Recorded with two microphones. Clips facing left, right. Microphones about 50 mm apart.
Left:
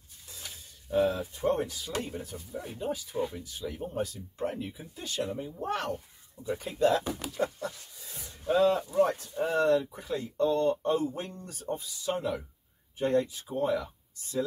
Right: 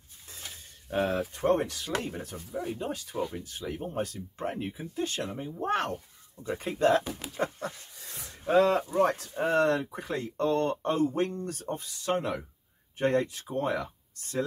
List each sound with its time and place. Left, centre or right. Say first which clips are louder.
0.8 s speech: left 1 dB; right
3.3 s speech: right 1 dB; right
8.0 s speech: right 2 dB; right